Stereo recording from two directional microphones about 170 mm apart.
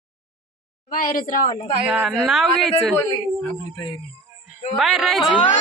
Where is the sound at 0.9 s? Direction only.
55° left (ahead or behind).